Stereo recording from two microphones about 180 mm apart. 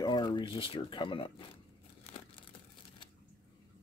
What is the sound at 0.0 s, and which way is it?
Speech, 25° left (ahead or behind).